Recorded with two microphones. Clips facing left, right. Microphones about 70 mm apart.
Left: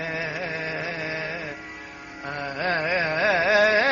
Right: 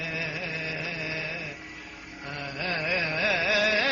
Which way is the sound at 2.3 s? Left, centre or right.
Left.